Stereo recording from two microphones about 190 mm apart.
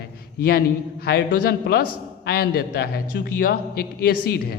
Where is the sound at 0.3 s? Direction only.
55° left (ahead or behind).